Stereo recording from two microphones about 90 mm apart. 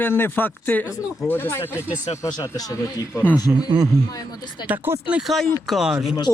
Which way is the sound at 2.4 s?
45° left (ahead or behind).